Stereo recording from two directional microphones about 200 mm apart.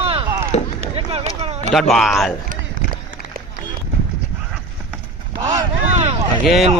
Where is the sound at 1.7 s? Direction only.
Centre (ahead or behind).